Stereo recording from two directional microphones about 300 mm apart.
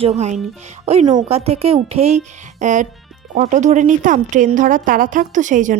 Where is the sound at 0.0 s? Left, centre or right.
Right.